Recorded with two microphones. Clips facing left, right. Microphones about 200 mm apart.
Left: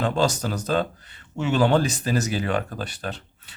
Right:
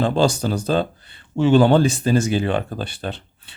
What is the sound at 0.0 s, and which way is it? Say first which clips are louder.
A man's voice: right 4 dB; 30° right (ahead or behind).